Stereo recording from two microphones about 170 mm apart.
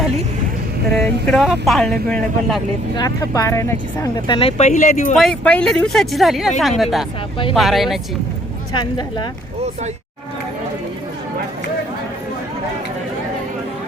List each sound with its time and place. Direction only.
1.0 s speech: centre (ahead or behind)
2.9 s speech: 20° left (ahead or behind)
4.3 s speech: 35° left (ahead or behind); by 5.1 s 50° left (ahead or behind)
5.1 s speech: 5° left (ahead or behind)
8.7 s speech: 25° left (ahead or behind)